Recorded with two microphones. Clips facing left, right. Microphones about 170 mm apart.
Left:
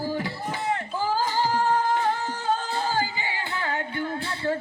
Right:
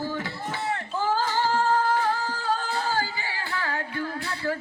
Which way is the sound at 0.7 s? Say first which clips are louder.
Even; 15° left (ahead or behind).